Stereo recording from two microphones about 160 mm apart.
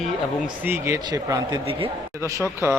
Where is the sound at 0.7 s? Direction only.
15° right (ahead or behind).